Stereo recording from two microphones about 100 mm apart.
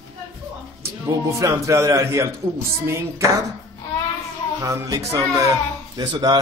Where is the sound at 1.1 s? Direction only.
30° right (ahead or behind).